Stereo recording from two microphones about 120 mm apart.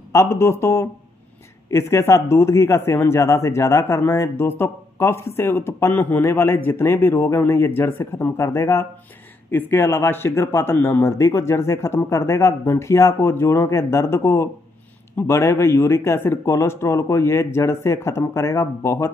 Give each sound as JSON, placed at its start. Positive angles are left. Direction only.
{"t": 0.1, "sound": "speech", "side_deg": 25}